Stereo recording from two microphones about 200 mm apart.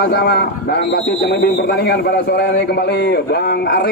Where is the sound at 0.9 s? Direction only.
45° left (ahead or behind).